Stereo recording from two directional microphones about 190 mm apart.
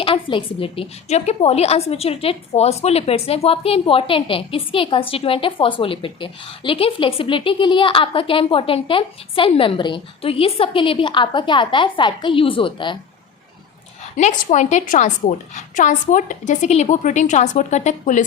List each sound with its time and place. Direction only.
0.0 s a woman's voice: 25° left (ahead or behind)
14.2 s a woman's voice: 40° left (ahead or behind)